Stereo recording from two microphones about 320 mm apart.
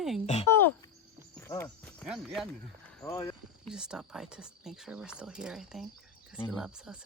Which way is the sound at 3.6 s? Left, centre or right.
Centre.